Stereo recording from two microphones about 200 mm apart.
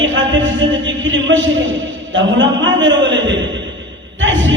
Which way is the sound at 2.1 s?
65° right (ahead or behind).